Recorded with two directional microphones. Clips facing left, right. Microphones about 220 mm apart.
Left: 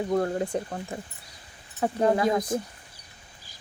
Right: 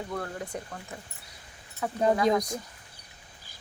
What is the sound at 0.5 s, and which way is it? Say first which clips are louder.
Speech: left 8 dB; 30° left (ahead or behind).